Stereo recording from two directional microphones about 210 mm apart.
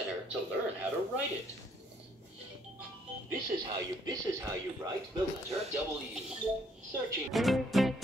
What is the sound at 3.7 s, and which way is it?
Speech, 20° right (ahead or behind).